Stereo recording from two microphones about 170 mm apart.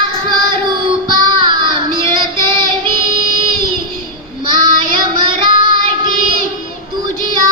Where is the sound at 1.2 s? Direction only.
25° right (ahead or behind).